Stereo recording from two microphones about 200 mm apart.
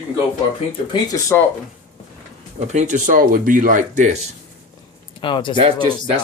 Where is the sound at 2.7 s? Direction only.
35° right (ahead or behind).